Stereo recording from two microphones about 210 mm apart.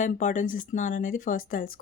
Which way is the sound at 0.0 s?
35° left (ahead or behind).